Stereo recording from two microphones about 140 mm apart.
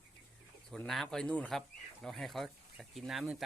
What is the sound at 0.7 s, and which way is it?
Speech, 5° left (ahead or behind).